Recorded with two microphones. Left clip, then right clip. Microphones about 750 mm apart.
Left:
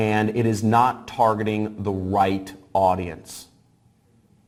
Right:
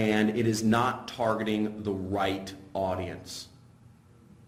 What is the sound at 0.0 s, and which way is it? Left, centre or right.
Speech, left.